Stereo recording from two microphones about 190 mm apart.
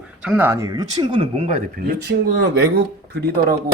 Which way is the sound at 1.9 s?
60° right (ahead or behind).